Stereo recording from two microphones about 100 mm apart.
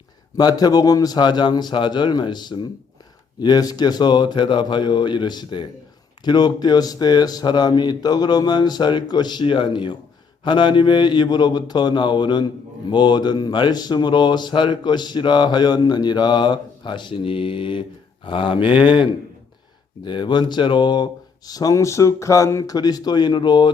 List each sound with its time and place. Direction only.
0.3 s speech: 40° left (ahead or behind); by 18.9 s 60° left (ahead or behind)
20.1 s speech: 50° left (ahead or behind)